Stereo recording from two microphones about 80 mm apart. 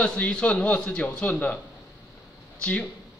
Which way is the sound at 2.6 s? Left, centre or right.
Centre.